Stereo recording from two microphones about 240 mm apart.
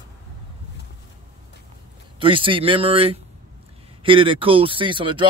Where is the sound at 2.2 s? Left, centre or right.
Right.